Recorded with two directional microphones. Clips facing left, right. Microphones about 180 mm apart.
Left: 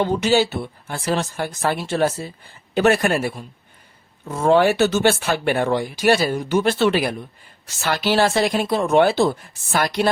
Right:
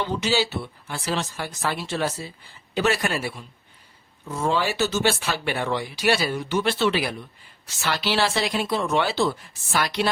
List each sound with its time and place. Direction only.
0.0 s speech: 50° left (ahead or behind)